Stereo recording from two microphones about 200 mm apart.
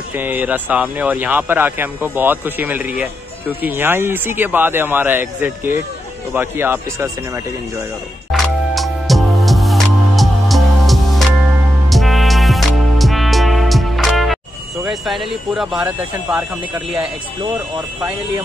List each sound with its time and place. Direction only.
0.1 s speech: 10° right (ahead or behind)
8.3 s music: centre (ahead or behind)
14.9 s speech: centre (ahead or behind)